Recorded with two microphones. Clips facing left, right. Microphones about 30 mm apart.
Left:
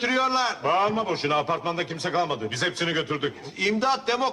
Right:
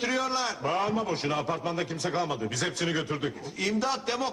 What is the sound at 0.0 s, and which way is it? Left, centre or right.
A man's voice, left.